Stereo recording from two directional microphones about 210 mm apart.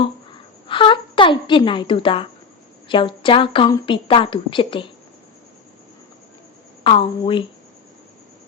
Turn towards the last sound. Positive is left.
turn(degrees=25)  # may be behind; listen again after turning